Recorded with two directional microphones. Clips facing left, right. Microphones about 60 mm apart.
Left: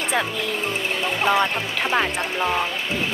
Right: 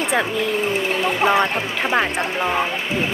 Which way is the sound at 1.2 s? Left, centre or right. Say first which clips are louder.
Right 1 dB; right.